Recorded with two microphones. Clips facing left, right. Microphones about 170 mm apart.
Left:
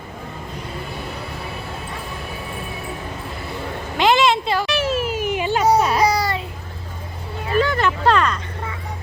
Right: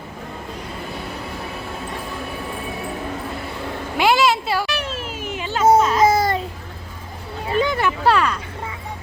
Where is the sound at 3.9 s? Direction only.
10° right (ahead or behind).